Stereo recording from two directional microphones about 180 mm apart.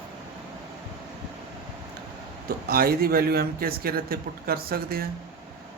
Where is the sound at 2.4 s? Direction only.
55° right (ahead or behind).